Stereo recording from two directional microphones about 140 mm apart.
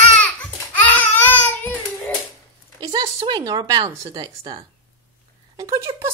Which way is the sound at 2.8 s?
35° right (ahead or behind).